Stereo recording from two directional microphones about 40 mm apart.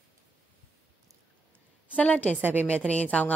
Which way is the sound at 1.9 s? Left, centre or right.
Left.